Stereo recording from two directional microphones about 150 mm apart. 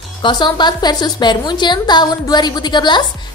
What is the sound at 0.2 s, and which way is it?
A woman's voice, 30° left (ahead or behind).